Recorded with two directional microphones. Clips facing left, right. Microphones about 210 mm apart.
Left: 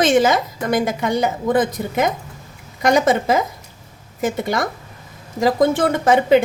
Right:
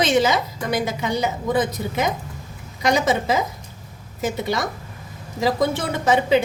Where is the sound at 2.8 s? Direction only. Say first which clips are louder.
Left 4 dB; 50° left (ahead or behind).